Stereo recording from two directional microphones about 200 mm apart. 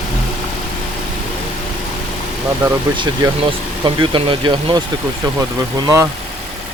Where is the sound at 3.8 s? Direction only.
25° right (ahead or behind).